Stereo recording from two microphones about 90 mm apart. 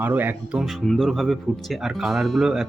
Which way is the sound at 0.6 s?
Centre (ahead or behind).